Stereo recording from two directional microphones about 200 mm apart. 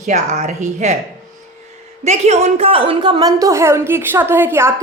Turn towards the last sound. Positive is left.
turn(degrees=-10)  # may be behind; listen again after turning